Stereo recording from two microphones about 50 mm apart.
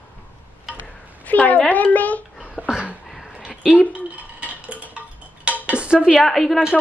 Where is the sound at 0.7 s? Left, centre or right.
Left.